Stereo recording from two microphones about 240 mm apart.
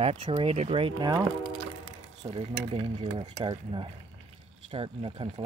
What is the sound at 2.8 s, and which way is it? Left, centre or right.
Speech, right.